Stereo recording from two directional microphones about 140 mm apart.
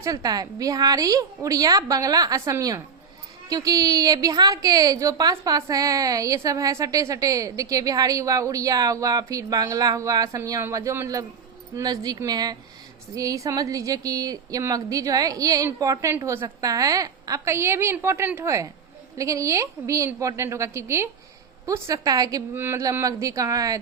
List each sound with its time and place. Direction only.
0.0 s a woman's voice: 25° right (ahead or behind)